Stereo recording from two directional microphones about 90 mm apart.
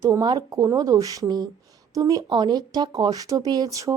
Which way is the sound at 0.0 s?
45° right (ahead or behind).